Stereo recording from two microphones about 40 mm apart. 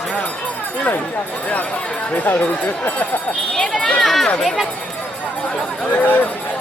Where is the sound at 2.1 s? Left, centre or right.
Left.